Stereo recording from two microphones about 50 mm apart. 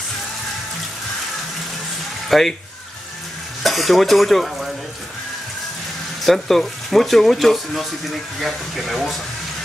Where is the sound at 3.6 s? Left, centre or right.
Centre.